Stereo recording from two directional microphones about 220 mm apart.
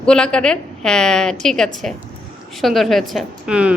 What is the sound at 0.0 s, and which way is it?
A woman's voice, 5° left (ahead or behind).